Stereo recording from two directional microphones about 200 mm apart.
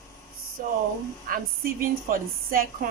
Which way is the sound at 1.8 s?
45° right (ahead or behind).